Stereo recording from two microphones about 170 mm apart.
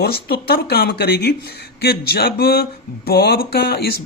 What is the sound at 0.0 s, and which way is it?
Speech, 65° left (ahead or behind).